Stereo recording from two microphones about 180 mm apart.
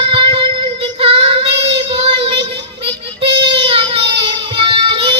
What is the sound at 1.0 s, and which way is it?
Child singing, 30° right (ahead or behind).